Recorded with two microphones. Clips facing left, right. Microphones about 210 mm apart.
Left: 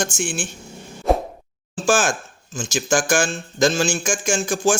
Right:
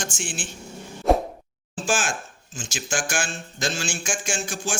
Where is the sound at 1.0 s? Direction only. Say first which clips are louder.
Left 1 dB; centre (ahead or behind).